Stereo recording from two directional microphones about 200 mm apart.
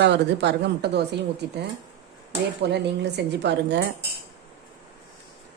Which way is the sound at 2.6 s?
55° right (ahead or behind).